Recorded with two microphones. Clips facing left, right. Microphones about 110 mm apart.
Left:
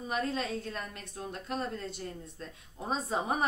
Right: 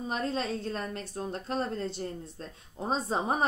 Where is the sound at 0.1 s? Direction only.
30° right (ahead or behind).